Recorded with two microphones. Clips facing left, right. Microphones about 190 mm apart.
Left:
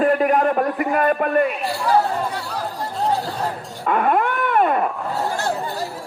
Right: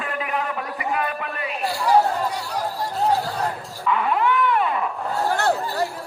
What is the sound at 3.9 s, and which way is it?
Dog, 50° left (ahead or behind).